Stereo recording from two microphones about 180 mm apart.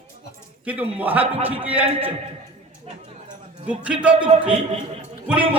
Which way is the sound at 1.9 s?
30° right (ahead or behind).